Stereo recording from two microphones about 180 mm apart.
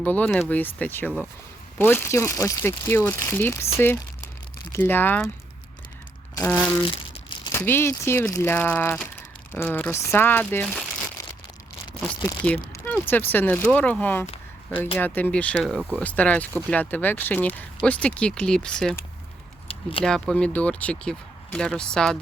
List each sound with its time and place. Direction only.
0.0 s speech: 10° left (ahead or behind)
4.7 s speech: 10° left (ahead or behind)
6.3 s speech: 15° left (ahead or behind)
12.4 s speech: 10° left (ahead or behind)
19.6 s a sound: 30° left (ahead or behind)
20.1 s speech: 5° left (ahead or behind)